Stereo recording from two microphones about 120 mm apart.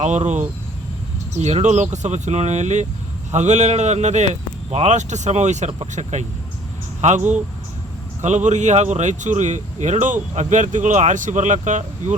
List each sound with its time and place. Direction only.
0.0 s speech: 80° right